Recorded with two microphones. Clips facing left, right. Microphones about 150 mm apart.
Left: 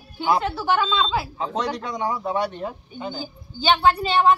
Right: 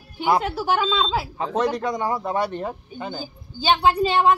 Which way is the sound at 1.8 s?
55° right (ahead or behind).